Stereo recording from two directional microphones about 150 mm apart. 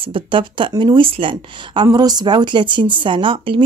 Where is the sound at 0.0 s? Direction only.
35° right (ahead or behind).